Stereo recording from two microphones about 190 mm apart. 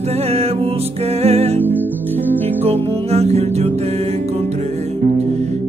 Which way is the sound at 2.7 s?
35° right (ahead or behind).